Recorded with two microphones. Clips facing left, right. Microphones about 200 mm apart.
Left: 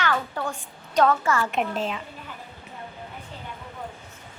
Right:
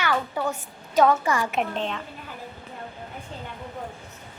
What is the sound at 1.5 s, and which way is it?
Speech, 5° left (ahead or behind).